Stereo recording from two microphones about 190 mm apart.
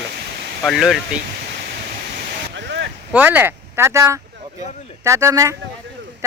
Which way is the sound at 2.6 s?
65° right (ahead or behind).